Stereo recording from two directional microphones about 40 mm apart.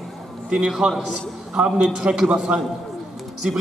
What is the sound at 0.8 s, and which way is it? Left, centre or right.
A man's voice, right.